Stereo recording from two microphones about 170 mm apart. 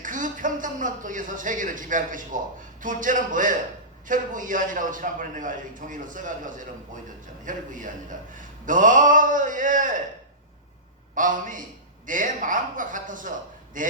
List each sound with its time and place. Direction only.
0.0 s a man's voice: 50° right (ahead or behind)
11.1 s a man's voice: 50° right (ahead or behind)